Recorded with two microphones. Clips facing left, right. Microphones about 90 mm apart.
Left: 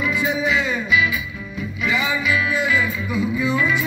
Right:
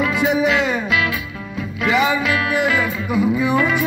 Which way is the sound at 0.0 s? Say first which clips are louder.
Right 4 dB; 75° right (ahead or behind).